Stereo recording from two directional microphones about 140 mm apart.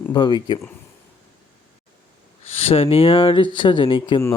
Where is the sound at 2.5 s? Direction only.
45° left (ahead or behind).